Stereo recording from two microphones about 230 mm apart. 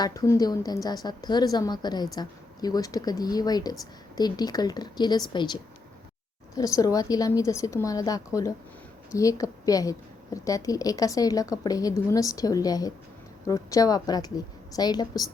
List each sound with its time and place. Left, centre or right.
0.0 s a woman's voice: centre